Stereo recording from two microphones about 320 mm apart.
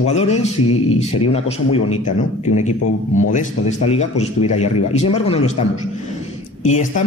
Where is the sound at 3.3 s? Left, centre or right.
Left.